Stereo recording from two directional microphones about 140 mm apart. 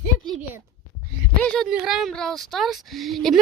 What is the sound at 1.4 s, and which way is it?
Speech, 10° left (ahead or behind).